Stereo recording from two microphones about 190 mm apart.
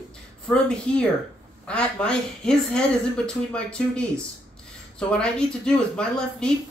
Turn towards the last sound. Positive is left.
turn(degrees=5)  # may be behind; listen again after turning